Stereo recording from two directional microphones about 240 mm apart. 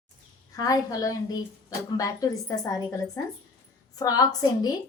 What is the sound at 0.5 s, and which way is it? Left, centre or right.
Speech, centre.